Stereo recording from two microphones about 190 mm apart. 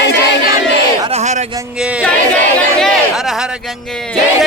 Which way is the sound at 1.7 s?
5° right (ahead or behind).